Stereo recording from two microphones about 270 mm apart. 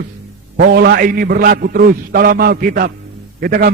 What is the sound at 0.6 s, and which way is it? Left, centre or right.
A man's voice, right.